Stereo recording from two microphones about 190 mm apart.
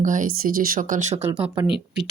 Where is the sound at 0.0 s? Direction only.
40° right (ahead or behind).